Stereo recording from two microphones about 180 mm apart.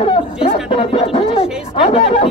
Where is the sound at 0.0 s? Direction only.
30° left (ahead or behind).